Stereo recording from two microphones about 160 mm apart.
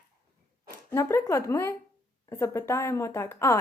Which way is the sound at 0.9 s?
15° left (ahead or behind).